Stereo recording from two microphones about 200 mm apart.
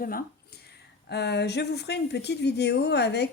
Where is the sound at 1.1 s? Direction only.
55° left (ahead or behind).